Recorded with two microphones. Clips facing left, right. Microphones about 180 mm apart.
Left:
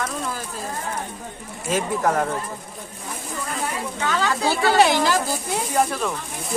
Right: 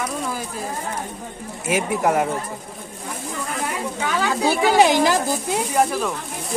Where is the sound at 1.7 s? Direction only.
10° right (ahead or behind).